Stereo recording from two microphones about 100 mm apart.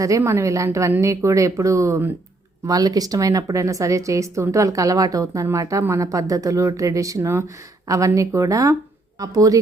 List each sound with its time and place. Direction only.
0.2 s a woman's voice: 30° right (ahead or behind)
2.6 s a woman's voice: 40° right (ahead or behind)